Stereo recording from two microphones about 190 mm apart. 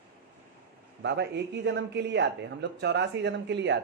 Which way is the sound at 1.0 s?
65° right (ahead or behind).